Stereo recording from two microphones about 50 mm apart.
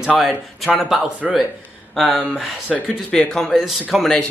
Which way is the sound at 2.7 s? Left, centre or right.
Centre.